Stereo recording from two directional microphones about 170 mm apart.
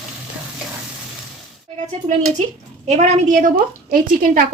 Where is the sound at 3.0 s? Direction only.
50° right (ahead or behind).